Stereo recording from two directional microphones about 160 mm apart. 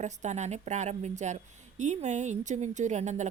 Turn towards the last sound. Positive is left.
turn(degrees=-45)  # may be behind; listen again after turning